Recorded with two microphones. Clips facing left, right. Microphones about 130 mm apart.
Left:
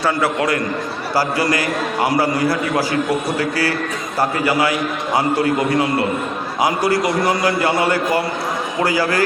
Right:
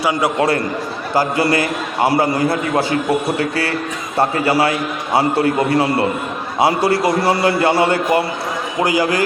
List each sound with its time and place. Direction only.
0.0 s a man's voice: 15° right (ahead or behind)
0.3 s a man's voice: 30° right (ahead or behind)